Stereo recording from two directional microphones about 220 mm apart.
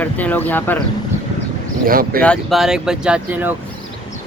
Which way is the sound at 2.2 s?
Centre (ahead or behind).